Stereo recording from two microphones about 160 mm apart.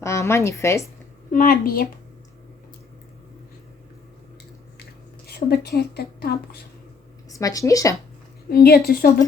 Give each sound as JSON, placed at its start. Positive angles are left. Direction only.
{"t": 0.0, "sound": "a woman's voice", "side_deg": 15}
{"t": 1.3, "sound": "a woman's voice", "side_deg": 60}
{"t": 5.2, "sound": "a woman's voice", "side_deg": 75}
{"t": 7.3, "sound": "speech", "side_deg": 20}
{"t": 8.4, "sound": "a woman's voice", "side_deg": 75}